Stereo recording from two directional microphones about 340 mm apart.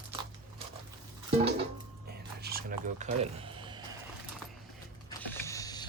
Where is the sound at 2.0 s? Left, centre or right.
Right.